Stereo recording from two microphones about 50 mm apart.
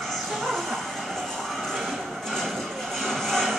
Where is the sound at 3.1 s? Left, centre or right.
Centre.